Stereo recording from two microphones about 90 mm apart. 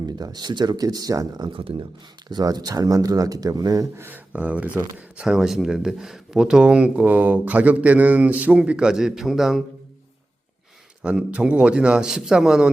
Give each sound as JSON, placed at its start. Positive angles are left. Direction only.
{"t": 0.0, "sound": "speech", "side_deg": -50}
{"t": 1.5, "sound": "speech", "side_deg": -80}
{"t": 2.3, "sound": "speech", "side_deg": -45}
{"t": 3.9, "sound": "speech", "side_deg": -20}
{"t": 11.0, "sound": "speech", "side_deg": -15}